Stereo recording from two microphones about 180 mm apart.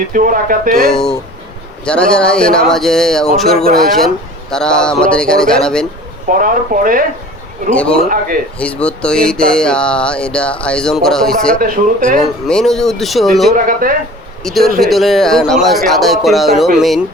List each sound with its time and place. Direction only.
0.1 s speech: 50° right (ahead or behind)
0.9 s speech: centre (ahead or behind)
6.2 s speech: 50° right (ahead or behind)
8.5 s speech: 5° left (ahead or behind)
11.6 s speech: 50° right (ahead or behind)
12.5 s speech: 5° left (ahead or behind)
13.7 s speech: 50° right (ahead or behind)
14.4 s speech: centre (ahead or behind)